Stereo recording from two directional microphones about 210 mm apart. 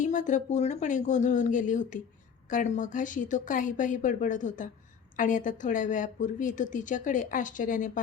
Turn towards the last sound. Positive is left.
turn(degrees=40)  # may be behind; listen again after turning